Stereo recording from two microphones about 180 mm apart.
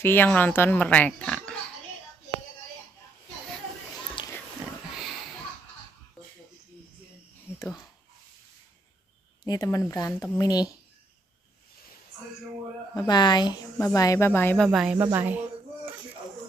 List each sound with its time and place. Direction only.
0.0 s speech: 10° left (ahead or behind)
4.9 s a sound: centre (ahead or behind)
7.5 s a sound: 20° left (ahead or behind)
9.4 s speech: 20° left (ahead or behind)
12.9 s speech: 25° left (ahead or behind)
14.7 s speech: 5° right (ahead or behind)